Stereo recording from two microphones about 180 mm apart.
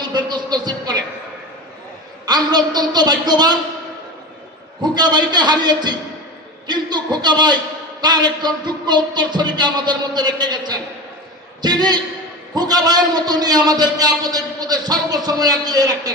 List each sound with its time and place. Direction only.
0.1 s a sound: 25° right (ahead or behind)
2.2 s a man's voice: 25° right (ahead or behind)
4.8 s a man's voice: 25° right (ahead or behind)